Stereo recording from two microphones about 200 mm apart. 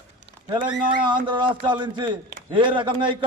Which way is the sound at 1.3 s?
25° right (ahead or behind).